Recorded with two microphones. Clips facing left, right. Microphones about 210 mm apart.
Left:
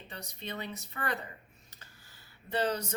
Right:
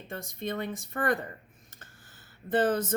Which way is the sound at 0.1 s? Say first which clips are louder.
Right 8 dB; 50° right (ahead or behind).